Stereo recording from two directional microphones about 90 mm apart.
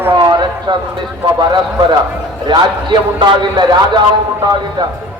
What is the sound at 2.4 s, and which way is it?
A man's voice, 55° right (ahead or behind).